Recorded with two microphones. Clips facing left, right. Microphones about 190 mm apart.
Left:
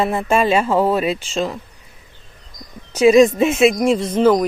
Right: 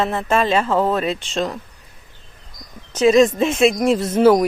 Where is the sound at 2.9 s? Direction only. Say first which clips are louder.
Left 2 dB; 10° left (ahead or behind); by 4.4 s 10° right (ahead or behind).